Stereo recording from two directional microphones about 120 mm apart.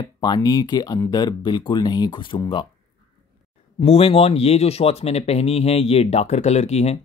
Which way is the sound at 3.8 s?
55° left (ahead or behind).